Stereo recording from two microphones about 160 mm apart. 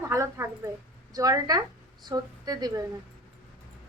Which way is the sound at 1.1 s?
20° right (ahead or behind).